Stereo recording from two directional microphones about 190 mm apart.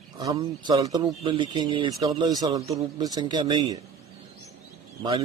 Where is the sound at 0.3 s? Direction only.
20° right (ahead or behind).